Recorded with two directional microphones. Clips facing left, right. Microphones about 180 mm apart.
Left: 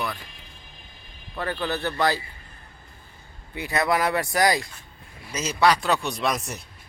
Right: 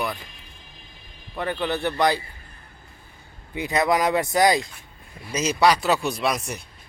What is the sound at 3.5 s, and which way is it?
Speech, 20° right (ahead or behind).